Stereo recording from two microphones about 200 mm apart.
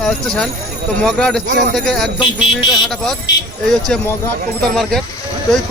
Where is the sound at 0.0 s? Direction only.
5° left (ahead or behind).